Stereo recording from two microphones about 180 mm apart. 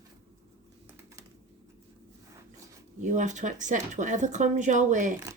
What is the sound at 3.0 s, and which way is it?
Speech, 45° right (ahead or behind).